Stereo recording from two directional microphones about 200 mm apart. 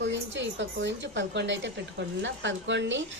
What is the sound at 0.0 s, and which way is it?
A woman's voice, 65° right (ahead or behind).